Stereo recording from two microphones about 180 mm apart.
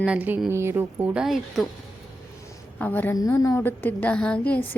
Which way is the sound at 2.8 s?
10° left (ahead or behind).